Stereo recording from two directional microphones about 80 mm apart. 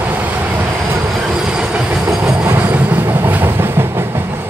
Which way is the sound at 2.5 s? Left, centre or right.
Centre.